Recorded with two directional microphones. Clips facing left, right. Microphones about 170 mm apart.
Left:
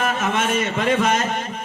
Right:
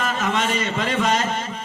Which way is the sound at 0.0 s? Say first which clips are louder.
Left 1 dB; 55° left (ahead or behind).